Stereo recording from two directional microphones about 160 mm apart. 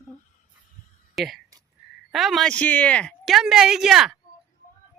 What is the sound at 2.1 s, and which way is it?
Speech, centre (ahead or behind).